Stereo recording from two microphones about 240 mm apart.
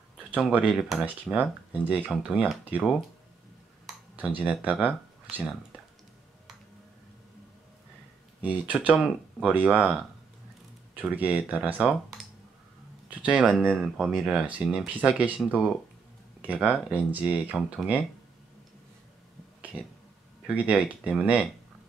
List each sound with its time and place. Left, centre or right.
0.3 s speech: centre
4.4 s speech: centre
8.4 s speech: centre
11.0 s speech: centre
20.4 s speech: centre